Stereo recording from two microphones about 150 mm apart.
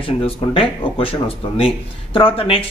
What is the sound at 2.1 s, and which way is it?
Speech, 35° left (ahead or behind).